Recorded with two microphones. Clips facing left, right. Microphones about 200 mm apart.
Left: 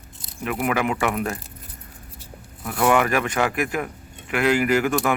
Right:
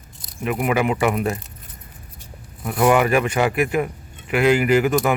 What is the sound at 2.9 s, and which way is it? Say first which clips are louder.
Speech: right 3 dB; 5° right (ahead or behind).